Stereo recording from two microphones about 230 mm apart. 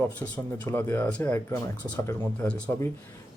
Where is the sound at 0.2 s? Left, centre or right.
Centre.